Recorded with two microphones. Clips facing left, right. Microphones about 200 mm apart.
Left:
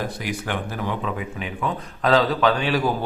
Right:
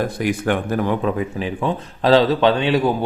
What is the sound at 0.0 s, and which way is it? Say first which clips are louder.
Speech: right 8 dB; 50° right (ahead or behind).